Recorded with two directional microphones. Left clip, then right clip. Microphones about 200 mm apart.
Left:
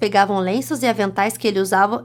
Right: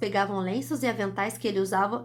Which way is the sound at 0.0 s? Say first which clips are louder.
Left 10 dB; 35° left (ahead or behind).